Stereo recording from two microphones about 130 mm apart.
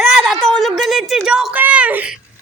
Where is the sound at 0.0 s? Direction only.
Centre (ahead or behind).